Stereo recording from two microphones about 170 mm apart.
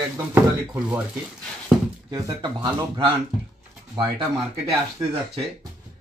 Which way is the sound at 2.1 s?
20° right (ahead or behind).